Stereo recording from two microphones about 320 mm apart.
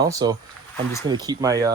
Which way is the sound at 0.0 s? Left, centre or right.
Centre.